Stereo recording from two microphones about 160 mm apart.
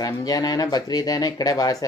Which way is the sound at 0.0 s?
25° left (ahead or behind).